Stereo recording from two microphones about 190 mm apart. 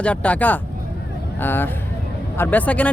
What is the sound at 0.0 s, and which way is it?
A man's voice, 5° left (ahead or behind).